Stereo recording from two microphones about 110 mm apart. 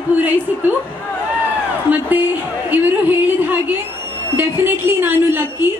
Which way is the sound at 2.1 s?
15° right (ahead or behind).